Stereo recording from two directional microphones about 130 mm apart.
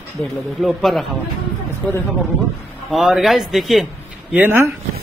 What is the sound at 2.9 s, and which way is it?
Speech, centre (ahead or behind).